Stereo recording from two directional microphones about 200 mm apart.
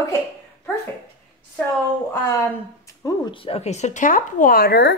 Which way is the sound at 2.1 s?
15° left (ahead or behind).